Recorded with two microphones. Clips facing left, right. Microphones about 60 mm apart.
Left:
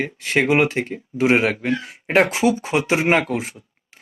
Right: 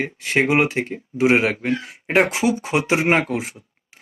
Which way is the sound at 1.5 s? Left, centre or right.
Right.